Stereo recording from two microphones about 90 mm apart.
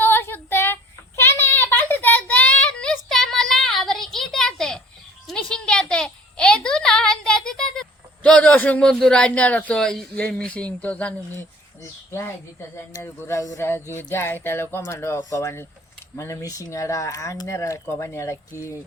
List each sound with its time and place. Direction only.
0.0 s child singing: 25° left (ahead or behind); by 4.8 s 5° left (ahead or behind)
5.2 s a sound: 5° left (ahead or behind)
10.2 s speech: 15° left (ahead or behind)
11.3 s speech: 30° left (ahead or behind)
13.6 s speech: 25° left (ahead or behind)